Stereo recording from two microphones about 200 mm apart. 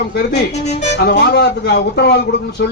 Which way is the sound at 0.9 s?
55° left (ahead or behind).